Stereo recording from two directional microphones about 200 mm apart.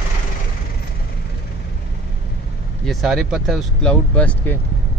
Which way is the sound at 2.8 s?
Centre (ahead or behind).